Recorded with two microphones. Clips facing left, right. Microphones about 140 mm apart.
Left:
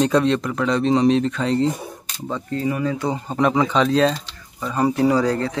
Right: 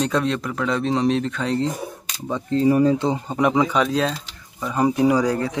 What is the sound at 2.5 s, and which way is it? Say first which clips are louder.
Speech: right 7 dB; 30° right (ahead or behind).